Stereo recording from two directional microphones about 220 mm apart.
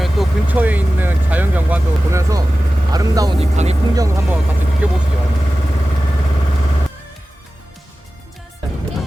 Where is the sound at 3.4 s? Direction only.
30° right (ahead or behind).